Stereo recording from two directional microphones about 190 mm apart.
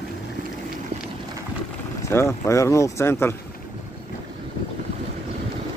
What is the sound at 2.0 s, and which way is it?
Speech, 15° left (ahead or behind).